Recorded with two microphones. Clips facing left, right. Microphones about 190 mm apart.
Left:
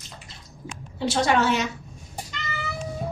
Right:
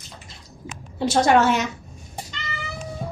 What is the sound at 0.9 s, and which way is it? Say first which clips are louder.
Speech: right 4 dB; 50° right (ahead or behind).